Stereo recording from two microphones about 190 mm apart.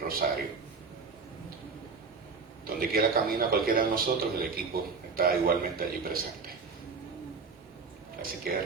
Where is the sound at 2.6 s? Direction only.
50° right (ahead or behind).